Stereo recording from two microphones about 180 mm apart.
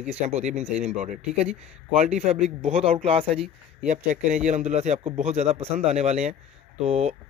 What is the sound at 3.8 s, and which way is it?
Speech, 45° right (ahead or behind).